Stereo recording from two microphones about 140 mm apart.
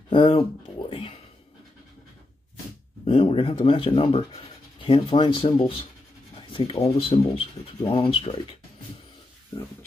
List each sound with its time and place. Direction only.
0.1 s speech: 40° left (ahead or behind)
3.1 s speech: 40° left (ahead or behind)